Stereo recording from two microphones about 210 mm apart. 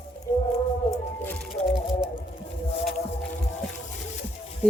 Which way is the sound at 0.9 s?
10° left (ahead or behind).